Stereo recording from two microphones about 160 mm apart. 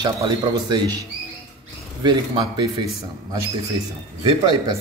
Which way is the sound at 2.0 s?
30° right (ahead or behind).